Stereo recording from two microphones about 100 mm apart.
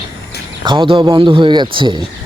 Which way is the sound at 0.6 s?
55° right (ahead or behind).